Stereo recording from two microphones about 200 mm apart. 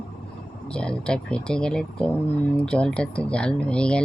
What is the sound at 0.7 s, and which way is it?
Speech, 5° left (ahead or behind).